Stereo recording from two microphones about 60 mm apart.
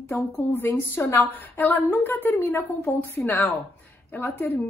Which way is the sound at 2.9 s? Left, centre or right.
Left.